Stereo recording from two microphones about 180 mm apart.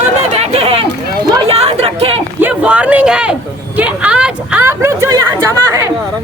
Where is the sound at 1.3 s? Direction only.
30° right (ahead or behind).